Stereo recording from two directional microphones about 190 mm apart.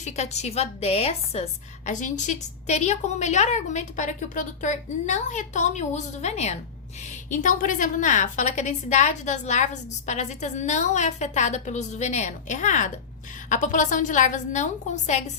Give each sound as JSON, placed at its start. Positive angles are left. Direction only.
{"t": 0.0, "sound": "a woman's voice", "side_deg": 35}